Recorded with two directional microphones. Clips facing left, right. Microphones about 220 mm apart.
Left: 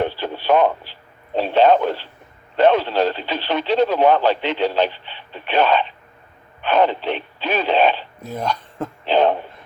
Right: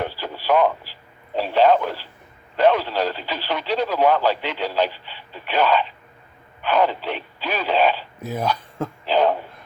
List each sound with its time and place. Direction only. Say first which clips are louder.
0.0 s radio: left 5 dB; 25° left (ahead or behind)
1.4 s speech: left 2 dB; 25° left (ahead or behind)
8.2 s speech: right 2 dB; 5° right (ahead or behind)
9.0 s speech: left 2 dB; 25° left (ahead or behind)